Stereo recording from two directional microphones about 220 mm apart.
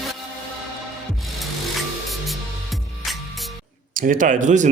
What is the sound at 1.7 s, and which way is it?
Music, centre (ahead or behind).